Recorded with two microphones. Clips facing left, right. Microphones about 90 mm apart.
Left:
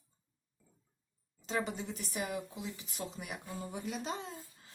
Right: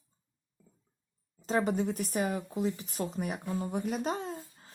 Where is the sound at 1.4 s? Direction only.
45° right (ahead or behind).